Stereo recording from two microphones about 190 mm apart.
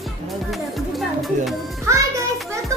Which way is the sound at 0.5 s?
Centre (ahead or behind).